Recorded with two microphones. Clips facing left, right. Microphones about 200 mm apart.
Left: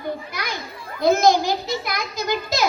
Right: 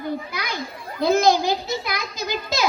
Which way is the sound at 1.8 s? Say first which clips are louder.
Left 1 dB; 55° left (ahead or behind).